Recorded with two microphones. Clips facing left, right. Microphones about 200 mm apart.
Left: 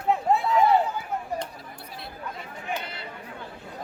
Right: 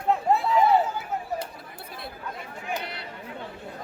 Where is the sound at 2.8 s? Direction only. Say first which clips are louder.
Right 1 dB; 70° right (ahead or behind).